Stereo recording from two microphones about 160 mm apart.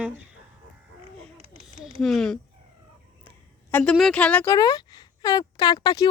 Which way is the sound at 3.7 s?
5° left (ahead or behind).